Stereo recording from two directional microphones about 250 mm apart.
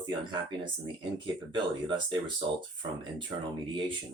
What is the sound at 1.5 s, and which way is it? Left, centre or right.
Speech, centre.